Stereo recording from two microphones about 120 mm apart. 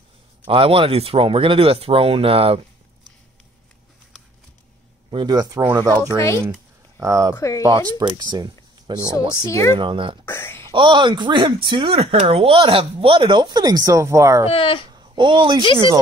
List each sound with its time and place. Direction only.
0.5 s speech: 50° right (ahead or behind)
5.1 s speech: 35° right (ahead or behind)
5.9 s speech: 20° left (ahead or behind)
7.0 s speech: 25° right (ahead or behind)
7.3 s speech: 25° left (ahead or behind)
8.0 s speech: 40° right (ahead or behind)
9.5 s speech: 25° left (ahead or behind)
9.8 s speech: 45° right (ahead or behind)
10.2 s a sound: 20° left (ahead or behind)
10.7 s speech: 45° right (ahead or behind); by 14.5 s 25° right (ahead or behind)
14.5 s speech: 50° left (ahead or behind)
14.9 s a sound: 40° right (ahead or behind)
15.6 s speech: 40° left (ahead or behind)